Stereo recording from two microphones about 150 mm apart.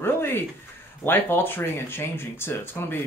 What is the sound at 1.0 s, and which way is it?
Speech, 15° left (ahead or behind).